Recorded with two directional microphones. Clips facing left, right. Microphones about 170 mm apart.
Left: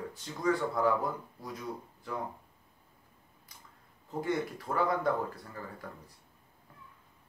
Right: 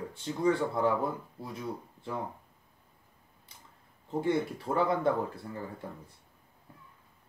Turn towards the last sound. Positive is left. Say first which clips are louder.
# right 4 dB
turn(degrees=-25)  # may be behind; listen again after turning